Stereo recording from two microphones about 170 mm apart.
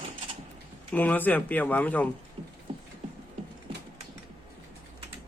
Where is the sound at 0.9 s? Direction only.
10° left (ahead or behind).